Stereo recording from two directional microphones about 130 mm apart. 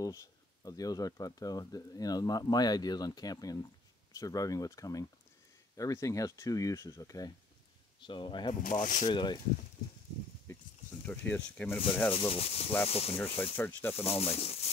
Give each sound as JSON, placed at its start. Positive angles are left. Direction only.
{"t": 0.0, "sound": "speech", "side_deg": 25}
{"t": 8.6, "sound": "speech", "side_deg": 75}
{"t": 9.1, "sound": "speech", "side_deg": 35}
{"t": 11.1, "sound": "speech", "side_deg": 10}
{"t": 12.1, "sound": "speech", "side_deg": 45}
{"t": 13.6, "sound": "speech", "side_deg": 15}
{"t": 14.0, "sound": "speech", "side_deg": 50}